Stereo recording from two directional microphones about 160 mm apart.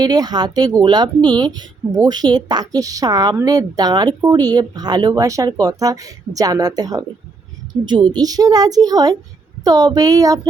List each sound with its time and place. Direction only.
0.0 s speech: 25° right (ahead or behind)